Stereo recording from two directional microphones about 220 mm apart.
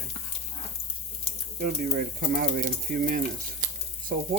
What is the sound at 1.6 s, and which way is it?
Speech, 40° right (ahead or behind).